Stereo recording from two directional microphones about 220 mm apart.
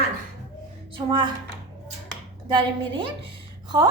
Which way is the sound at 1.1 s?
20° right (ahead or behind).